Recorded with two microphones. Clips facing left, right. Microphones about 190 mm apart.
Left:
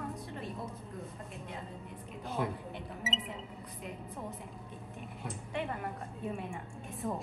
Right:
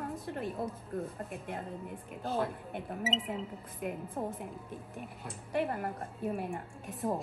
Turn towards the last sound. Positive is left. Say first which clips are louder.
# right 2 dB
turn(degrees=0)  # may be behind; listen again after turning